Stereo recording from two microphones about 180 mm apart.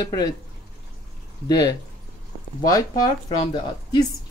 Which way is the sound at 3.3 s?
25° left (ahead or behind).